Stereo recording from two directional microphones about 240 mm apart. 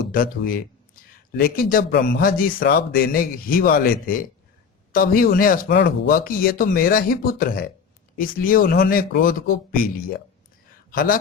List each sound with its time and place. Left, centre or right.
0.0 s speech: left